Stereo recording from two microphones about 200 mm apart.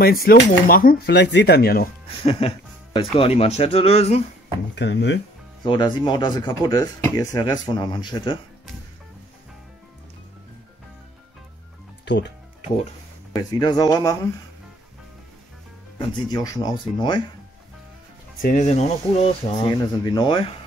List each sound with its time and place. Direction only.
0.0 s speech: 50° left (ahead or behind)
2.0 s speech: 30° left (ahead or behind)
4.7 s speech: 60° left (ahead or behind)
5.7 s speech: 20° left (ahead or behind)
12.0 s music: 60° left (ahead or behind)
13.3 s speech: 20° left (ahead or behind)
16.0 s speech: 20° left (ahead or behind)
18.4 s speech: 40° left (ahead or behind)
19.5 s speech: 20° left (ahead or behind)